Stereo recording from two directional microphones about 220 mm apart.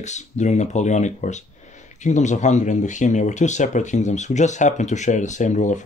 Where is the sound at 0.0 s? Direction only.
30° left (ahead or behind).